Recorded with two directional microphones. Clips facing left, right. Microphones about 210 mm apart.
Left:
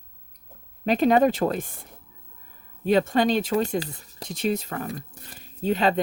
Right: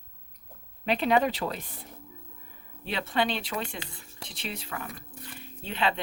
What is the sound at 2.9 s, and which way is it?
Speech, 45° left (ahead or behind).